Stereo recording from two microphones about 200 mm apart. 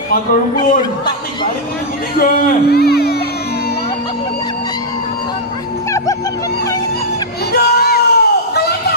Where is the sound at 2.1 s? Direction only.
45° left (ahead or behind).